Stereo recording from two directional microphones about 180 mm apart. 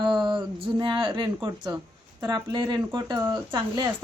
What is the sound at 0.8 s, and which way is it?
Speech, 25° right (ahead or behind).